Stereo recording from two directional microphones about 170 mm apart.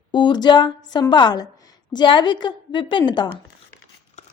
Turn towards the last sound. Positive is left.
turn(degrees=25)  # may be behind; listen again after turning